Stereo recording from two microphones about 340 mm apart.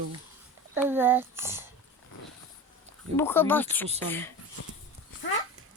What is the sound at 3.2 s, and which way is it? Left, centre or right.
Speech, centre.